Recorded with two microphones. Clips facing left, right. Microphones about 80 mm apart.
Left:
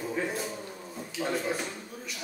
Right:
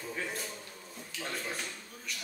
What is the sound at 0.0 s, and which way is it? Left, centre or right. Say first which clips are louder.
Music: left 7 dB; left.